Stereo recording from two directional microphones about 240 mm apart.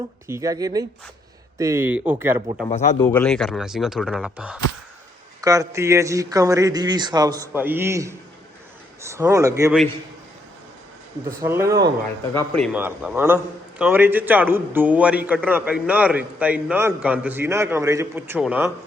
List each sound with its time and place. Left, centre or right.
0.3 s a man's voice: centre
2.6 s speech: left
3.0 s a man's voice: centre
11.3 s a man's voice: centre
12.5 s a man's voice: centre